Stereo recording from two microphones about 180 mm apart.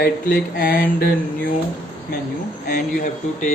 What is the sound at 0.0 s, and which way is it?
Mantra, 55° left (ahead or behind).